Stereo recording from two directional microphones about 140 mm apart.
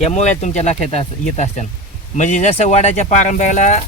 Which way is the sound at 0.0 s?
55° left (ahead or behind).